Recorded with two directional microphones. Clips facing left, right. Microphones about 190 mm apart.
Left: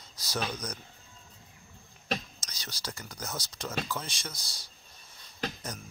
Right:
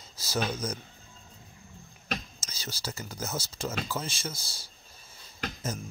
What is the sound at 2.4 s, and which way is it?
Speech, 5° right (ahead or behind).